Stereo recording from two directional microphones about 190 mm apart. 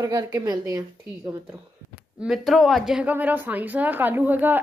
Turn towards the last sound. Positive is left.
turn(degrees=-10)  # may be behind; listen again after turning